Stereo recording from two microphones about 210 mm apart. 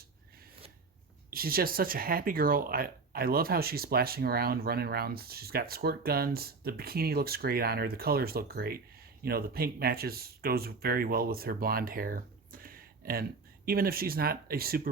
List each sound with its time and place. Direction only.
1.3 s speech: 45° right (ahead or behind)